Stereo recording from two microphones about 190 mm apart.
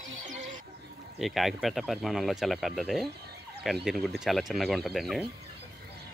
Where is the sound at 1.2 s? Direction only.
Centre (ahead or behind).